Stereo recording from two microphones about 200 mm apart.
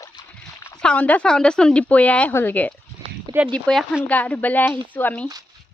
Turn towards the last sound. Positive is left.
turn(degrees=10)  # may be behind; listen again after turning